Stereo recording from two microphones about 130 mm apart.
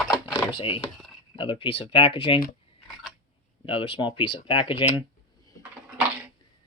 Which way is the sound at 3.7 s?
45° left (ahead or behind).